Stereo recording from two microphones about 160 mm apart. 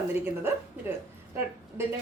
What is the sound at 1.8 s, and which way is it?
Speech, 15° right (ahead or behind).